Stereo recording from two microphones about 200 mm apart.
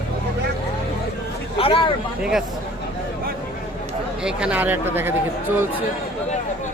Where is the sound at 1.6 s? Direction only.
25° left (ahead or behind).